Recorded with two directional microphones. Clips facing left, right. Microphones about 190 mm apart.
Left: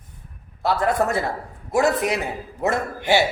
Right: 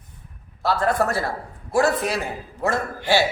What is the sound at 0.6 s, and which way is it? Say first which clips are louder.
A man's voice: left 1 dB; 20° left (ahead or behind).